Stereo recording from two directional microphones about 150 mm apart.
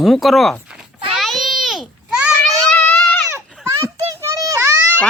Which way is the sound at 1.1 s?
Centre (ahead or behind).